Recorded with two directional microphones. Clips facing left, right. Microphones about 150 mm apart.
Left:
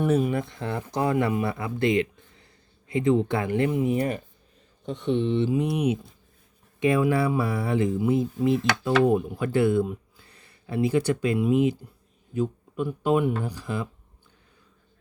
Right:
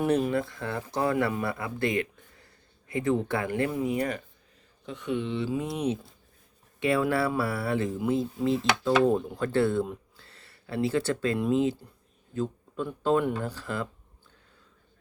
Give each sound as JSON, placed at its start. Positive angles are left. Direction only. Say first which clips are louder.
{"t": 0.0, "sound": "speech", "louder": "left 2 dB", "side_deg": 5}
{"t": 0.3, "sound": "speech", "louder": "left 1 dB", "side_deg": 20}
{"t": 10.2, "sound": "a sound", "louder": "even", "side_deg": 15}
{"t": 11.3, "sound": "speech", "louder": "left 4 dB", "side_deg": 10}